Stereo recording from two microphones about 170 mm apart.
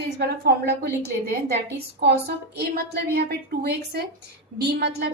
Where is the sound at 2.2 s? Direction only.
70° right (ahead or behind).